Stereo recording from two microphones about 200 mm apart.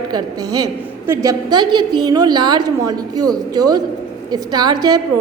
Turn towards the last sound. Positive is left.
turn(degrees=-20)  # may be behind; listen again after turning